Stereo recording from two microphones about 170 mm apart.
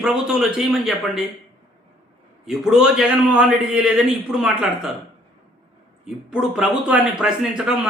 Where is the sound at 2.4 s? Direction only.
5° right (ahead or behind).